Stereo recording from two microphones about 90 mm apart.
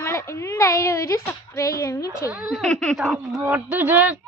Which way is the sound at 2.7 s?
10° left (ahead or behind).